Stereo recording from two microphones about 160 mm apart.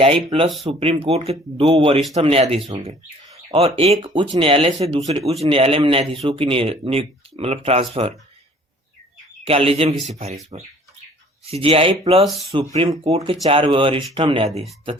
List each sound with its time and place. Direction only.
0.0 s speech: 35° right (ahead or behind)
9.5 s speech: 35° right (ahead or behind)
11.4 s speech: 35° right (ahead or behind)